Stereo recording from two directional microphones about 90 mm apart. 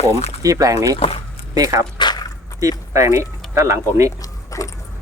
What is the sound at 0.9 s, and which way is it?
Speech, 90° left.